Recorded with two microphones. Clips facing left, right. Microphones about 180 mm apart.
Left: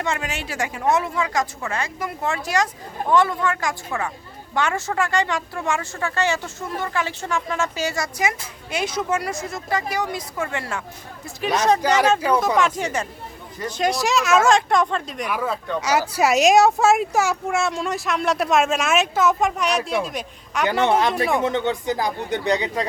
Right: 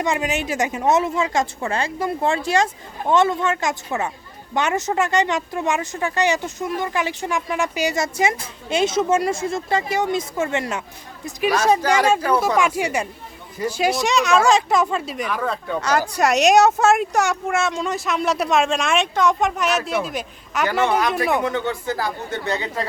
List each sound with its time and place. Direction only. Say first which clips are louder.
0.0 s a woman's voice: right 4 dB; 15° right (ahead or behind)
11.9 s speech: even; 10° right (ahead or behind)
15.3 s speech: left 1 dB; 5° left (ahead or behind)
20.8 s speech: left 1 dB; 25° left (ahead or behind)